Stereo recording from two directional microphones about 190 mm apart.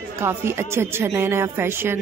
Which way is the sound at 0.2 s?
10° right (ahead or behind).